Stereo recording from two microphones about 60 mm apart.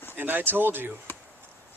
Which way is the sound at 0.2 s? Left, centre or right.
Right.